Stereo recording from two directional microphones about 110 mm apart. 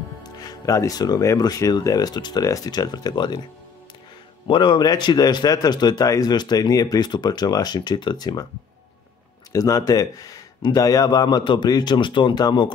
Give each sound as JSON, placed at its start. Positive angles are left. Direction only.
{"t": 0.2, "sound": "speech", "side_deg": 35}
{"t": 4.5, "sound": "speech", "side_deg": 45}
{"t": 9.5, "sound": "speech", "side_deg": 30}